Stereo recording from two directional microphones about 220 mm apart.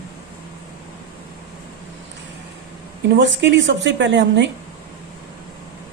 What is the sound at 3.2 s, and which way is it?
Speech, 55° right (ahead or behind).